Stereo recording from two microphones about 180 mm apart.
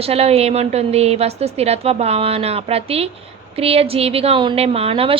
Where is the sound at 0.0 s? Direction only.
35° right (ahead or behind).